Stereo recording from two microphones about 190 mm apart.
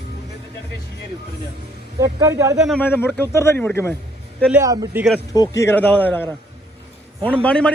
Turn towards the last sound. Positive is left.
turn(degrees=5)  # may be behind; listen again after turning